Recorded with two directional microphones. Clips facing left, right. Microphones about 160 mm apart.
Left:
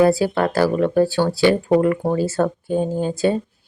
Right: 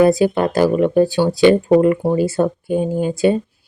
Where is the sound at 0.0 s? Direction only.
20° right (ahead or behind).